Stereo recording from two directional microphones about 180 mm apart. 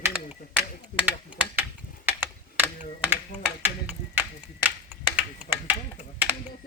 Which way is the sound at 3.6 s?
10° right (ahead or behind).